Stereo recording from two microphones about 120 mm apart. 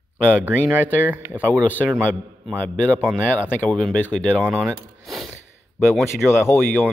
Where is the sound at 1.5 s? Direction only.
15° left (ahead or behind).